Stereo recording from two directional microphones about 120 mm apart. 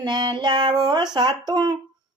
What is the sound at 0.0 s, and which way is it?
Speech, 40° right (ahead or behind).